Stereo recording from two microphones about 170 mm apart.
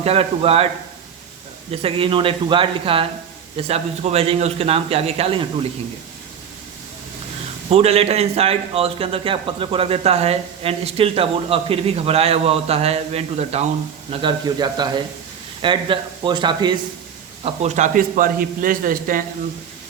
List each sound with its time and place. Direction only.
0.0 s a man's voice: 35° right (ahead or behind)
1.7 s a man's voice: 30° right (ahead or behind)
7.7 s a man's voice: 35° right (ahead or behind)
14.1 s speech: 25° right (ahead or behind)
17.4 s a man's voice: 40° right (ahead or behind)